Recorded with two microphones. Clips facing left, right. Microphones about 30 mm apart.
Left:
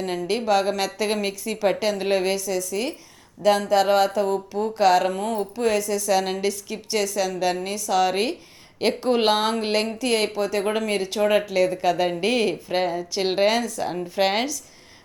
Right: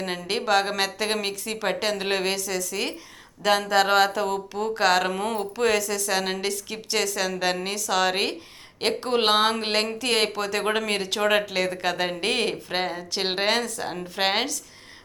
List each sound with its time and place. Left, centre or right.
0.0 s speech: right
5.2 s speech: right
6.1 s speech: right
6.5 s speech: right
8.8 s speech: right
10.3 s speech: right
10.7 s speech: right
11.2 s speech: right
11.4 s speech: right
12.0 s a woman's voice: right
13.3 s a woman's voice: right